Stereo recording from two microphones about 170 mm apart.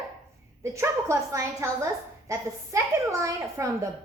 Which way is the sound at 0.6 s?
15° right (ahead or behind).